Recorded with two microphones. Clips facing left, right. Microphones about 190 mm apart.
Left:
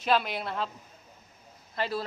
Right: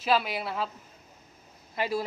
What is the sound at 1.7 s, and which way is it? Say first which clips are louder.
Speech: right 2 dB; 10° right (ahead or behind).